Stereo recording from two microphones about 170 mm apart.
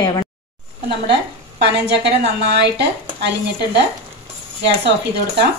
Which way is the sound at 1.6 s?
85° right.